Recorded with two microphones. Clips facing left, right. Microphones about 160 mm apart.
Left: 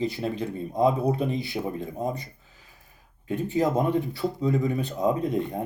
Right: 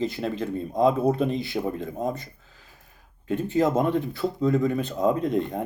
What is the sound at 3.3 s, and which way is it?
Speech, 15° left (ahead or behind).